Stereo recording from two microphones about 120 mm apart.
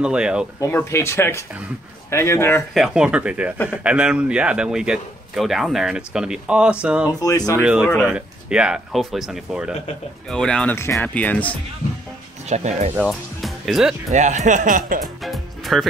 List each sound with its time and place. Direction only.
0.0 s a man's voice: 10° right (ahead or behind)
0.6 s speech: 25° left (ahead or behind)
2.7 s a man's voice: 5° right (ahead or behind)
7.1 s speech: 30° left (ahead or behind)
7.6 s a man's voice: 10° right (ahead or behind)
10.3 s speech: 5° left (ahead or behind)
10.8 s speech: 25° left (ahead or behind)
11.1 s speech: 10° left (ahead or behind)
12.4 s speech: 70° right (ahead or behind)
13.4 s music: centre (ahead or behind)
14.1 s speech: 80° right
15.2 s music: centre (ahead or behind)